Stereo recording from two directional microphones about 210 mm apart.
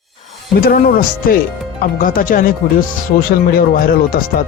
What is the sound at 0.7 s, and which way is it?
A man's voice, 40° left (ahead or behind).